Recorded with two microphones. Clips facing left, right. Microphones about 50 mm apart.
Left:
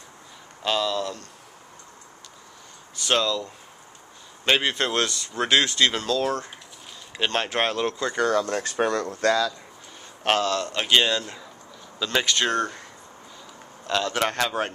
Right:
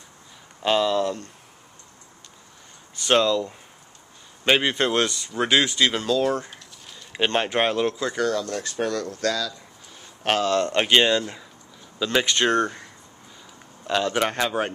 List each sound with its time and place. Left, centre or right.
0.6 s speech: right
3.1 s speech: right
4.5 s speech: centre
8.2 s speech: left
10.4 s speech: right; by 12.3 s centre
12.3 s speech: right
13.8 s speech: centre